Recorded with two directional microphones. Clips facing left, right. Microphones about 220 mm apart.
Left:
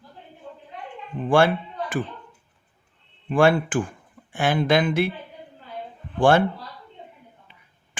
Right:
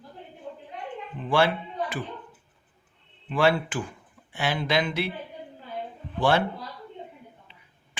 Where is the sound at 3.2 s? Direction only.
50° left (ahead or behind).